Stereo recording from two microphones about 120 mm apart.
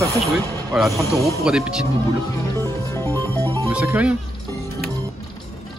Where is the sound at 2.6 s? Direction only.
20° left (ahead or behind).